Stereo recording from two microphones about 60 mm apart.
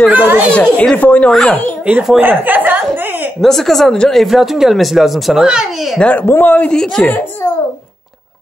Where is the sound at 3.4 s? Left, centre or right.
Centre.